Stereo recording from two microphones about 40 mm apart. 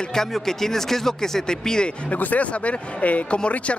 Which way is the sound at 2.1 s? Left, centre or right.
Left.